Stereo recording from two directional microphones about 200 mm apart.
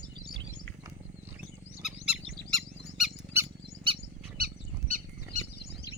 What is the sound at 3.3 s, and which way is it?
Squawk, 10° right (ahead or behind).